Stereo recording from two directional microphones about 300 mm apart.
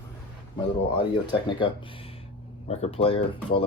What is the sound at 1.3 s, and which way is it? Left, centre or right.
Speech, centre.